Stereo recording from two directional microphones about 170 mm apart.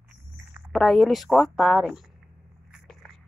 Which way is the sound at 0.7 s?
Centre (ahead or behind).